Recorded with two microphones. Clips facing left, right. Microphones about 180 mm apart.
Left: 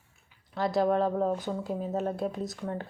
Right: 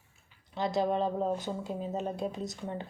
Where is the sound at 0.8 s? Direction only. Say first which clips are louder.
Left 4 dB; 20° right (ahead or behind).